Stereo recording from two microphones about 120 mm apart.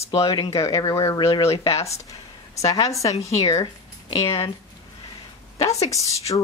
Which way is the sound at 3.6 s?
35° left (ahead or behind).